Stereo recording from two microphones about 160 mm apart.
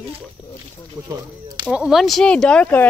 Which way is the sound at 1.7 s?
5° right (ahead or behind).